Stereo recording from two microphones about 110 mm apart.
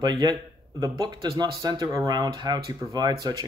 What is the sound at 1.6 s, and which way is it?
Speech, 35° right (ahead or behind).